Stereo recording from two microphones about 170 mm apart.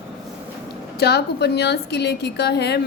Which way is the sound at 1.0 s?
75° left (ahead or behind).